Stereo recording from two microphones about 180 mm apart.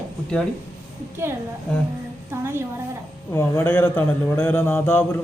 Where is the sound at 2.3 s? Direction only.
15° right (ahead or behind).